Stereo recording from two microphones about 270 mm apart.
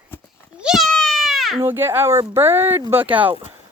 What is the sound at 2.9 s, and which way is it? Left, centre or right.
Speech, centre.